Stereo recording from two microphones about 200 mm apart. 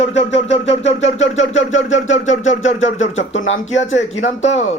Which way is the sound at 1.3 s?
75° left (ahead or behind).